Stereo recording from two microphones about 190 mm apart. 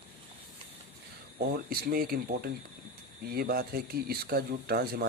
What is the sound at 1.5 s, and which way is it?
Speech, 55° right (ahead or behind).